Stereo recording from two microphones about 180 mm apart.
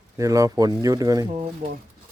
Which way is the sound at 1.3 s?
35° right (ahead or behind).